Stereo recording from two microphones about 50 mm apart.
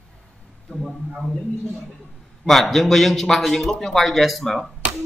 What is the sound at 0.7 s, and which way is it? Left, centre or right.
Speech, left.